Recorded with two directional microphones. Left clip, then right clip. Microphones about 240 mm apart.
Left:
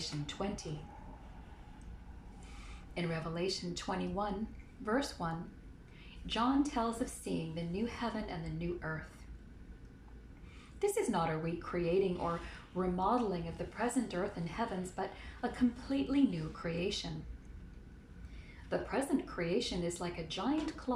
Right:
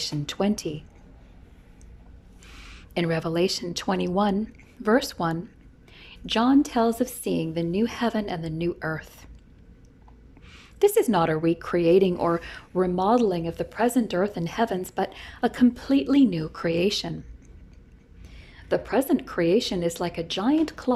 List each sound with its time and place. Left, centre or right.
0.4 s speech: right
2.9 s speech: right
10.8 s speech: right
18.7 s speech: right